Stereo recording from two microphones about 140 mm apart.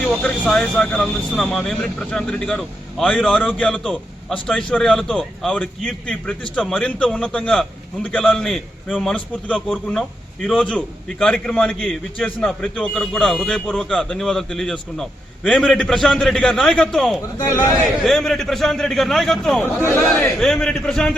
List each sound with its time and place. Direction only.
0.0 s speech: 5° left (ahead or behind)
17.3 s a man's voice: 20° left (ahead or behind)
17.8 s speech: centre (ahead or behind)